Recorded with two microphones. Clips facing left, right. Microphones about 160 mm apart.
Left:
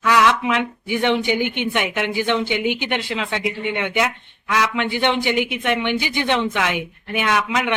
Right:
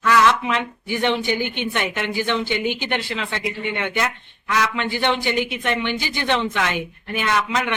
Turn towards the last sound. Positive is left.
turn(degrees=15)  # may be behind; listen again after turning